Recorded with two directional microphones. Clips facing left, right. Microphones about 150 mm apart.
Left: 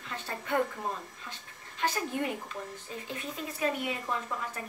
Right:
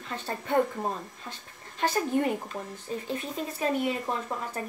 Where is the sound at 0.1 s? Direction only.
30° right (ahead or behind).